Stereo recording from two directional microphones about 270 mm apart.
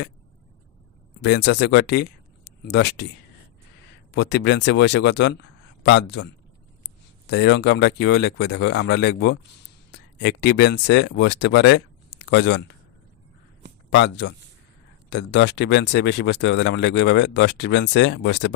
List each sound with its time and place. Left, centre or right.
1.2 s speech: left
4.1 s a man's voice: left
13.9 s speech: left